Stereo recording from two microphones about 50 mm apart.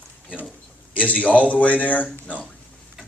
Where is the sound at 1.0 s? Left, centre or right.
Left.